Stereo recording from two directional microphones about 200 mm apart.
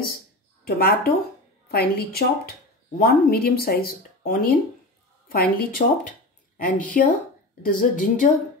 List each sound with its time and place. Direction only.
0.7 s speech: 50° left (ahead or behind)